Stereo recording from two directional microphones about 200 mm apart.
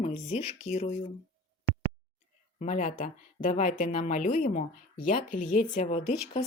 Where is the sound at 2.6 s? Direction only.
35° left (ahead or behind).